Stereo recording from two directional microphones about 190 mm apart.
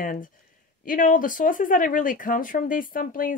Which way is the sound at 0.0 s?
45° left (ahead or behind).